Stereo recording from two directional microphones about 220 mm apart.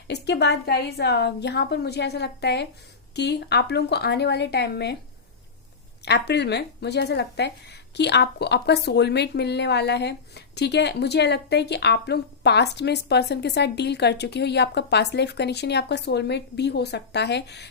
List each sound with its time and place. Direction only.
0.1 s a woman's voice: 50° left (ahead or behind)
6.1 s a woman's voice: 50° left (ahead or behind)